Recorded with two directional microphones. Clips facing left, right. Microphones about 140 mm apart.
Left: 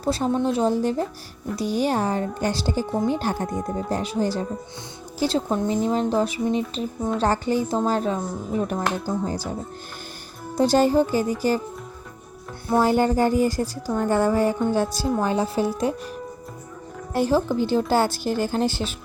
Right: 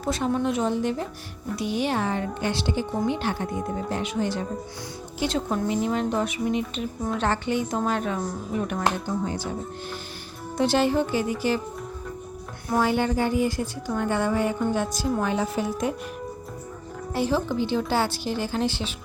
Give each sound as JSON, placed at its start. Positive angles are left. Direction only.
{"t": 0.0, "sound": "speech", "side_deg": 35}
{"t": 10.5, "sound": "speech", "side_deg": 40}
{"t": 12.6, "sound": "speech", "side_deg": 30}
{"t": 12.9, "sound": "speech", "side_deg": 40}
{"t": 17.2, "sound": "a woman's voice", "side_deg": 45}